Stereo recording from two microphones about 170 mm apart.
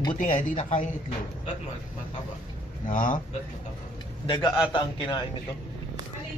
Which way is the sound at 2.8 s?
50° left (ahead or behind).